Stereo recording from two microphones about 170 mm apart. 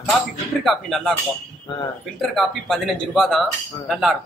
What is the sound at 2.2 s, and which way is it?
Speech, centre (ahead or behind).